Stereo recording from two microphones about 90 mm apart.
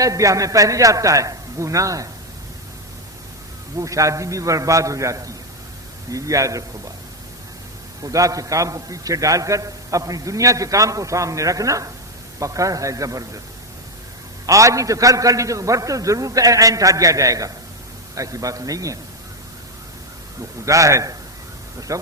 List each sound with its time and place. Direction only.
0.0 s a man's voice: 40° right (ahead or behind)
3.8 s a man's voice: 35° right (ahead or behind)
8.0 s a man's voice: 40° right (ahead or behind)
14.4 s a man's voice: 35° right (ahead or behind)
20.7 s a man's voice: 35° right (ahead or behind)